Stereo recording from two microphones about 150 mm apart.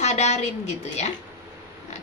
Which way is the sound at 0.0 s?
50° left (ahead or behind).